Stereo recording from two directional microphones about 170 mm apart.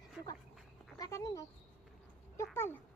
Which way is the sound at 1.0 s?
20° left (ahead or behind).